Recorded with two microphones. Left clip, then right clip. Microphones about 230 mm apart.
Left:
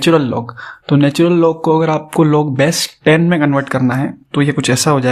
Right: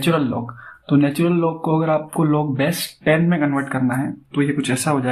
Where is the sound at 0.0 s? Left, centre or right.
Left.